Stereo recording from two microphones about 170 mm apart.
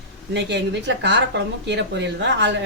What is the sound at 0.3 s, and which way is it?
A woman's voice, 90° right.